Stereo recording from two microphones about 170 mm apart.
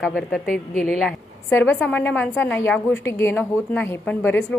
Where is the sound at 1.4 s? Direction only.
15° left (ahead or behind).